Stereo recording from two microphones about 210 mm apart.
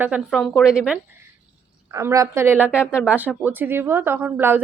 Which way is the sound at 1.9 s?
15° right (ahead or behind).